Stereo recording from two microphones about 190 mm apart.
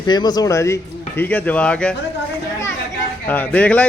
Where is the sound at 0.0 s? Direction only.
20° left (ahead or behind); by 2.0 s 5° left (ahead or behind).